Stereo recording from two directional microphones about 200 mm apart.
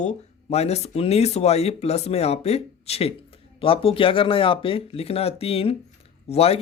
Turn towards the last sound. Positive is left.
turn(degrees=30)  # may be behind; listen again after turning